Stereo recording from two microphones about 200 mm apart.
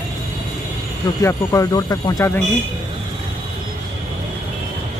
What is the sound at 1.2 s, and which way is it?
Speech, 15° left (ahead or behind).